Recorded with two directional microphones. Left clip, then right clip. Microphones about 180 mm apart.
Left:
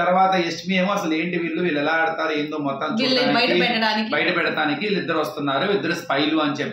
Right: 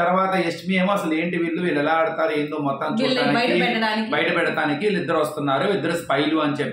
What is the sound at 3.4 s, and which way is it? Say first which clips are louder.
Speech: left 1 dB; 15° left (ahead or behind).